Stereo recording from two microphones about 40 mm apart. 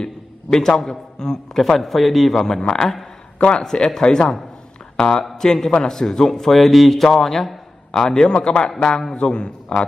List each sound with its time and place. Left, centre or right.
0.0 s a man's voice: centre
3.3 s a man's voice: left
3.6 s a man's voice: centre